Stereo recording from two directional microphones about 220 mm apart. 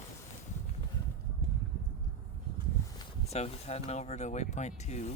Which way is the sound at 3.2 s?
30° left (ahead or behind).